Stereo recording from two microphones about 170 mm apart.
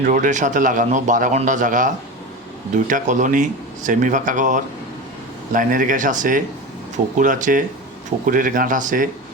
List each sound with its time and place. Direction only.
0.0 s a man's voice: 45° right (ahead or behind)